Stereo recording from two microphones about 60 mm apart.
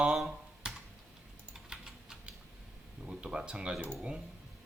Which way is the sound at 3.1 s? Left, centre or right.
Centre.